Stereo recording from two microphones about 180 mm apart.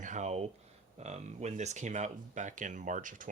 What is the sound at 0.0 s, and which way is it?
Speech, 40° right (ahead or behind).